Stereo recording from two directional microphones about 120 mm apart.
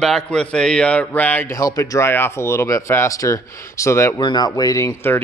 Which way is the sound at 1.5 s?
25° left (ahead or behind).